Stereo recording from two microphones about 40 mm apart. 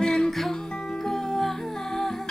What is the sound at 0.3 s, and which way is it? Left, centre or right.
Music, centre.